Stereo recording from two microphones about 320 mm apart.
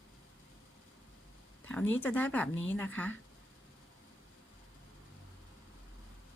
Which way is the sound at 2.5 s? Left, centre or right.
Left.